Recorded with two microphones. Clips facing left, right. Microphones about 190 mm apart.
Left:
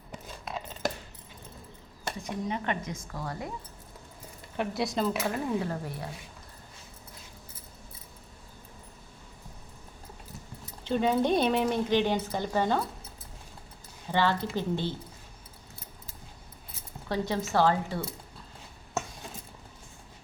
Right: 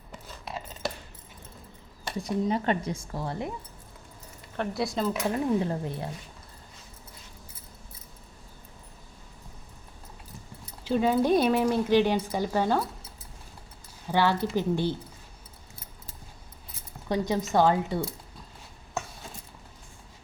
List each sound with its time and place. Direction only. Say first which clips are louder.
2.1 s speech: right 7 dB; 35° right (ahead or behind)
4.7 s speech: right 1 dB; centre (ahead or behind)
5.2 s speech: right 4 dB; 25° right (ahead or behind)
10.8 s speech: right 2 dB; 5° right (ahead or behind)
14.1 s speech: right 3 dB; 10° right (ahead or behind)
17.1 s speech: right 3 dB; 15° right (ahead or behind)